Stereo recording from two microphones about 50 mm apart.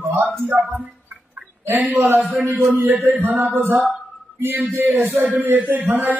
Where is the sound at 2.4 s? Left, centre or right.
Right.